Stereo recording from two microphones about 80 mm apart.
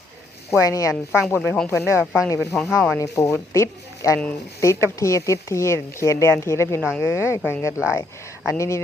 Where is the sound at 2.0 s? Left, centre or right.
Centre.